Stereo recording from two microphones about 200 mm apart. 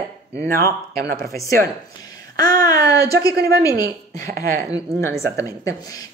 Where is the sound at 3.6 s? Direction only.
15° left (ahead or behind).